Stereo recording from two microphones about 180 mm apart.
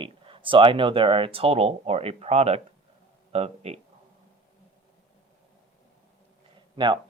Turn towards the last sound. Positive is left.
turn(degrees=-25)  # may be behind; listen again after turning